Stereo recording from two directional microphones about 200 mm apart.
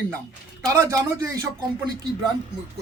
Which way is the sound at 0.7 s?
15° right (ahead or behind).